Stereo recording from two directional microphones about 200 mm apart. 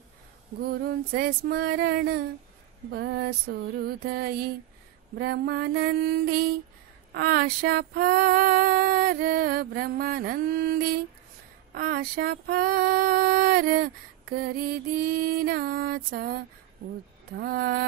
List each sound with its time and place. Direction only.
0.6 s female singing: 50° right (ahead or behind)